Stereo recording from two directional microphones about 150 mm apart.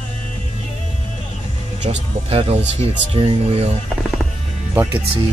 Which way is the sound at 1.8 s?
45° right (ahead or behind).